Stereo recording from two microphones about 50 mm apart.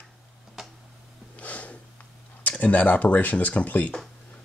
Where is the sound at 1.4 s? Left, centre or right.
Left.